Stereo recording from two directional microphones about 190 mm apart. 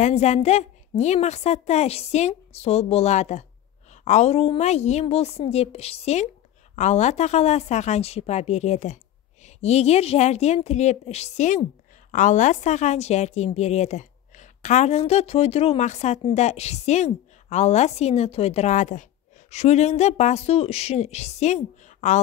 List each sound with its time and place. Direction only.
0.0 s a woman's voice: 35° left (ahead or behind)